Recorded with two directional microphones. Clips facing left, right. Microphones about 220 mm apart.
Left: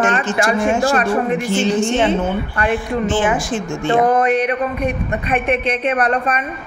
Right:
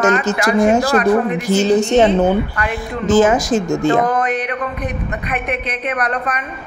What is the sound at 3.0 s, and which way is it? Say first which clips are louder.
Speech: right 9 dB; 40° right (ahead or behind).